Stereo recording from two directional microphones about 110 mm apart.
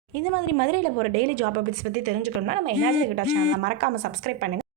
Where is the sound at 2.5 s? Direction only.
70° right (ahead or behind).